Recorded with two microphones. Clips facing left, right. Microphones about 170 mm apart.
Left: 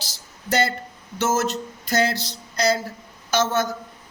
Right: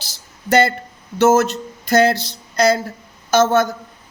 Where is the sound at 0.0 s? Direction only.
60° right (ahead or behind).